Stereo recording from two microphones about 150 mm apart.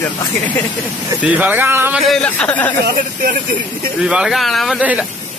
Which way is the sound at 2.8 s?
70° right (ahead or behind).